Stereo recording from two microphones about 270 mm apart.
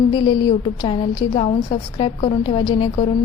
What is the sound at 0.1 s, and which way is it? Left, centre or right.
A woman's voice, centre.